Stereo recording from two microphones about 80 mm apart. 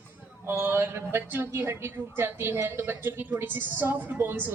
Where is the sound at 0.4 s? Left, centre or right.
Right.